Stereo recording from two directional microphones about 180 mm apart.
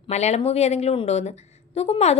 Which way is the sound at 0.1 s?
40° left (ahead or behind).